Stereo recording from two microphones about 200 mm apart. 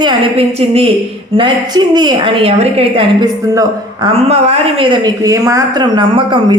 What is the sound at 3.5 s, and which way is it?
Speech, 15° right (ahead or behind).